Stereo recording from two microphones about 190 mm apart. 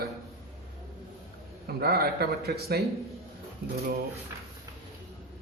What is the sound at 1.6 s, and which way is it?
Speech, 55° right (ahead or behind).